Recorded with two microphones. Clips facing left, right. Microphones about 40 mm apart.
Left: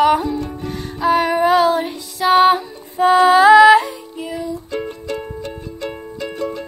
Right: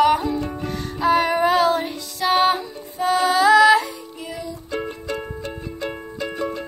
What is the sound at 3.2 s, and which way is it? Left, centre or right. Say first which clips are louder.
Female singing: left 6 dB; left.